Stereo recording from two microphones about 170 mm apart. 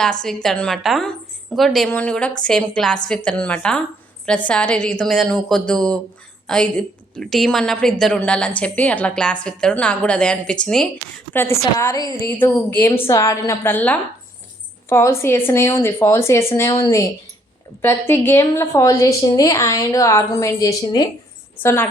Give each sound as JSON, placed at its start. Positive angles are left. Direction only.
{"t": 0.0, "sound": "a woman's voice", "side_deg": 5}
{"t": 21.6, "sound": "a woman's voice", "side_deg": 15}